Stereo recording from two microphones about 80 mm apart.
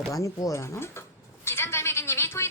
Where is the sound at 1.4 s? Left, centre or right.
Left.